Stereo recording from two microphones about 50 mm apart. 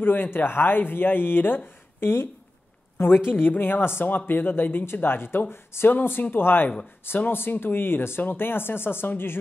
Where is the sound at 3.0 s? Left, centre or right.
Left.